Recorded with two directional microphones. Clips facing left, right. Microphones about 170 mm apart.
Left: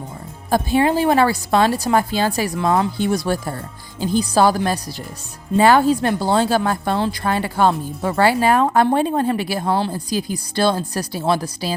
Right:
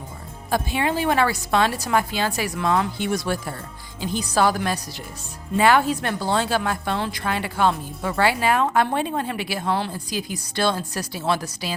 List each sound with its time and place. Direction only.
0.5 s a woman's voice: 35° left (ahead or behind)